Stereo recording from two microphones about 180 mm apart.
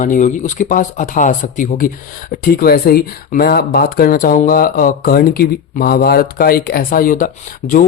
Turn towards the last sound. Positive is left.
turn(degrees=50)  # may be behind; listen again after turning